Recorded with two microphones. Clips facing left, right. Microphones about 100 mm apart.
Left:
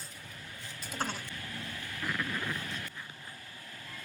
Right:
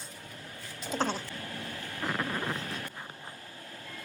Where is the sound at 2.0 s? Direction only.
40° right (ahead or behind).